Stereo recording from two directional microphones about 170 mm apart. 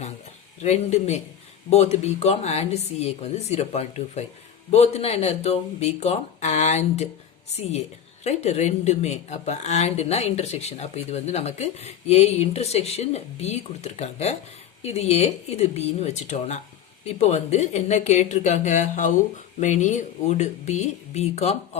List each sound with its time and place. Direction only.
0.6 s a woman's voice: 40° left (ahead or behind)